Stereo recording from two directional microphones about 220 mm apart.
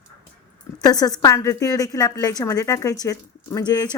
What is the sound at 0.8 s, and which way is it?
Speech, 15° left (ahead or behind).